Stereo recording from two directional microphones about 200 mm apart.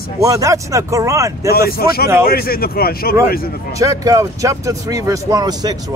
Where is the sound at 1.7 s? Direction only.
50° left (ahead or behind).